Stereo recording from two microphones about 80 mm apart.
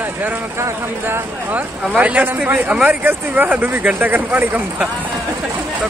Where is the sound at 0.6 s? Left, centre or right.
Right.